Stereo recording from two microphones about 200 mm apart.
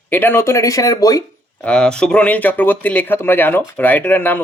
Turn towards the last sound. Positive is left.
turn(degrees=10)  # may be behind; listen again after turning